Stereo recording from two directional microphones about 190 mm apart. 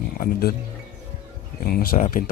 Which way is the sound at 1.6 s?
50° left (ahead or behind).